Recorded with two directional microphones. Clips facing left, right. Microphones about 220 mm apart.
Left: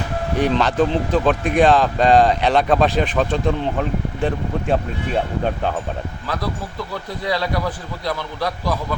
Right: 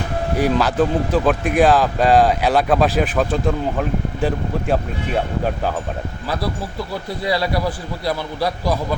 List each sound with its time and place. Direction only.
0.3 s speech: 5° right (ahead or behind)
6.2 s a man's voice: 10° right (ahead or behind)